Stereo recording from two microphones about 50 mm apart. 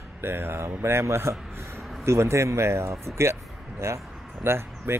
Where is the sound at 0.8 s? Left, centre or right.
Right.